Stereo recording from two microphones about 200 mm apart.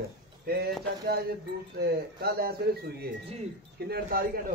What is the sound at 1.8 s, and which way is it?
Speech, 50° right (ahead or behind).